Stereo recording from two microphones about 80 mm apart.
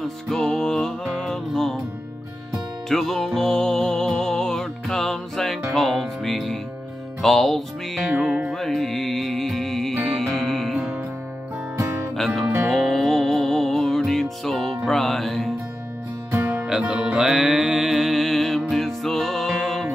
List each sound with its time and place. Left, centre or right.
0.0 s music: centre
2.9 s music: centre
12.6 s music: centre
16.3 s music: right
16.6 s music: centre